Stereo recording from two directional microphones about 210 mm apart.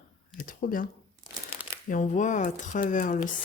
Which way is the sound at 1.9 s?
35° left (ahead or behind).